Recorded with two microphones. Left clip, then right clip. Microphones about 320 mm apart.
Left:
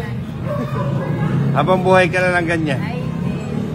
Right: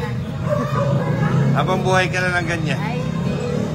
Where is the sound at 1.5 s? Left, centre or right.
Centre.